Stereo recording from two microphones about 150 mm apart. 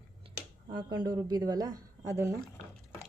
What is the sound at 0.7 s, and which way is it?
A woman's voice, 30° right (ahead or behind).